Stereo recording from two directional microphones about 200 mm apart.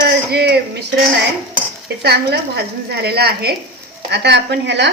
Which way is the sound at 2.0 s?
55° right (ahead or behind).